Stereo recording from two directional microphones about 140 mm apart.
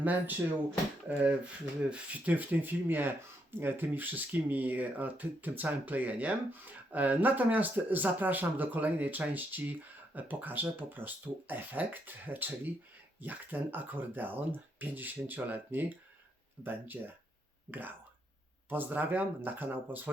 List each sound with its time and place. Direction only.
0.0 s speech: 10° right (ahead or behind)
1.9 s speech: 10° right (ahead or behind)